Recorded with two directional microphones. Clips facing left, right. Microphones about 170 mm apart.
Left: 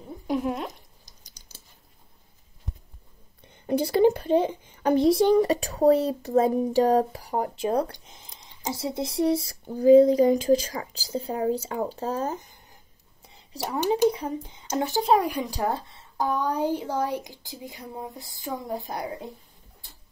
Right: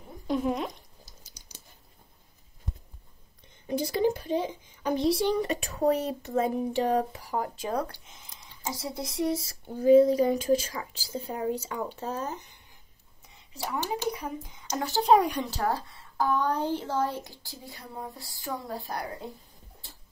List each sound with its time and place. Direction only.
0.3 s a sound: 5° left (ahead or behind)
1.0 s a sound: 10° right (ahead or behind)
3.6 s speech: 60° left (ahead or behind); by 8.3 s 35° left (ahead or behind)
8.3 s speech: 20° left (ahead or behind); by 12.4 s 40° left (ahead or behind)
13.7 s speech: 20° left (ahead or behind)
15.0 s speech: centre (ahead or behind)
15.5 s a woman's voice: 20° left (ahead or behind)